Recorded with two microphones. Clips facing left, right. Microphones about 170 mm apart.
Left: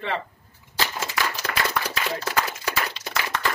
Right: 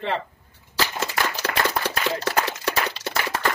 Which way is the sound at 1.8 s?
70° right (ahead or behind).